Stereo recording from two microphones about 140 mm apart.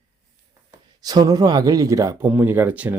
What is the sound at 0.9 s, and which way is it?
Speech, 25° right (ahead or behind).